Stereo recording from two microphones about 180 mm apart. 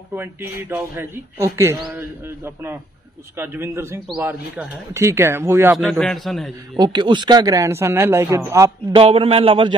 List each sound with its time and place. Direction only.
0.1 s a man's voice: 10° right (ahead or behind)
5.9 s a man's voice: 5° left (ahead or behind)
6.8 s a man's voice: 25° right (ahead or behind)
8.9 s a man's voice: 30° right (ahead or behind)